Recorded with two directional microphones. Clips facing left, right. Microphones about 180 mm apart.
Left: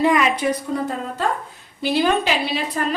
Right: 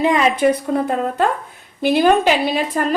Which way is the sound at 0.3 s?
55° right (ahead or behind).